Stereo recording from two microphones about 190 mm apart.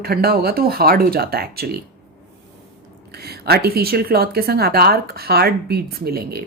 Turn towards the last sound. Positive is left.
turn(degrees=-55)  # may be behind; listen again after turning